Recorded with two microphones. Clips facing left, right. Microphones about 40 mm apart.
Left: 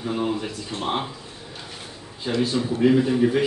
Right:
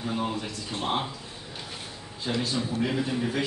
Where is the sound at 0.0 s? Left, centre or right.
Centre.